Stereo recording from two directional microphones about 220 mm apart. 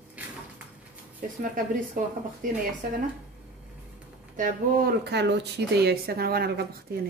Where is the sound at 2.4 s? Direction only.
35° right (ahead or behind).